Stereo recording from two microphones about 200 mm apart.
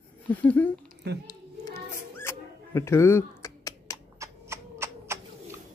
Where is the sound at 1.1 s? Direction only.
60° right (ahead or behind).